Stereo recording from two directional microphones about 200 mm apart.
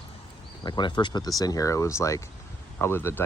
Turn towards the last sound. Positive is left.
turn(degrees=10)  # may be behind; listen again after turning